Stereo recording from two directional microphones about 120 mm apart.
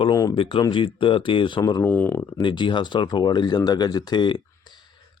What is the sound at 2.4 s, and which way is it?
Speech, 45° left (ahead or behind).